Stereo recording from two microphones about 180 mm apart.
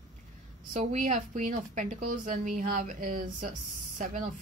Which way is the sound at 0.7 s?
45° right (ahead or behind).